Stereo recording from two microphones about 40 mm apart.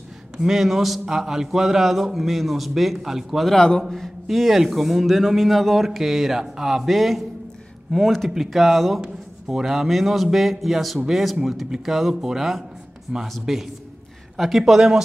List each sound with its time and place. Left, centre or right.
0.4 s a man's voice: centre
3.4 s a man's voice: centre
3.9 s a man's voice: centre